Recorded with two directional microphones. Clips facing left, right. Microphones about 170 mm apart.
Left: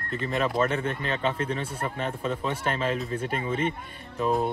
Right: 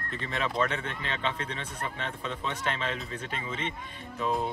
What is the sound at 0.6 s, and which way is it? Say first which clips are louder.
Speech: left 5 dB; 45° left (ahead or behind).